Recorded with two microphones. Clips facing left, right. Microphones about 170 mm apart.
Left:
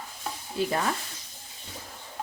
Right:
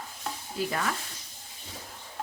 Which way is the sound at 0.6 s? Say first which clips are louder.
Left 3 dB; 30° left (ahead or behind).